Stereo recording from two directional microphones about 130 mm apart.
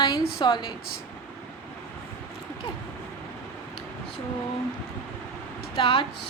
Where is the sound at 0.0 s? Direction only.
35° left (ahead or behind).